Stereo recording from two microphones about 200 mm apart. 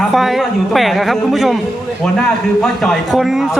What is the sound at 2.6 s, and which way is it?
A man's voice, centre (ahead or behind).